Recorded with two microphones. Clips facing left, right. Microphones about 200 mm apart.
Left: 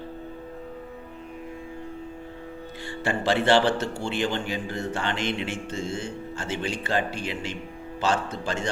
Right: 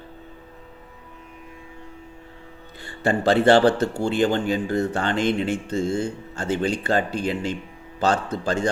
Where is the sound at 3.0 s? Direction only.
40° right (ahead or behind).